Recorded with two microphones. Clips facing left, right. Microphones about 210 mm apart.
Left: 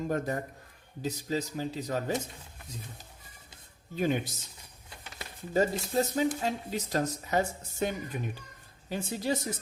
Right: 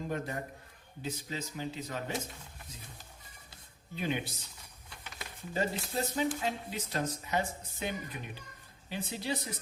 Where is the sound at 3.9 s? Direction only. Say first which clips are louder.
Left 6 dB; 45° left (ahead or behind).